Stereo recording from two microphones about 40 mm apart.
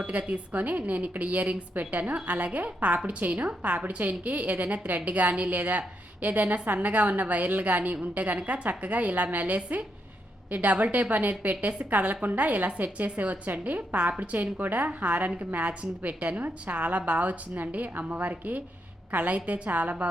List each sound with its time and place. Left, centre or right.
0.1 s a woman's voice: right